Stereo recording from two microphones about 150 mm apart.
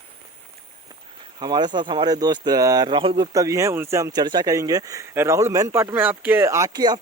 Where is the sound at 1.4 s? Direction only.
30° right (ahead or behind).